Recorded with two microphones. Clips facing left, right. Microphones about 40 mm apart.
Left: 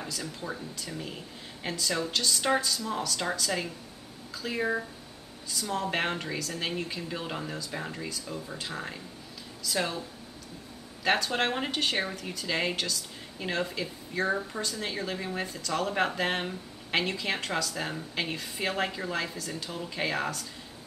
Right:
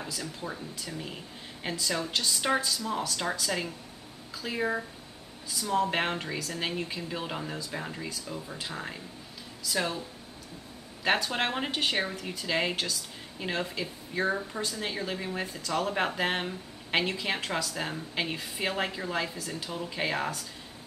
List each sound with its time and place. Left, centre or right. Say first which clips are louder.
0.0 s speech: even; centre
11.1 s speech: left 1 dB; centre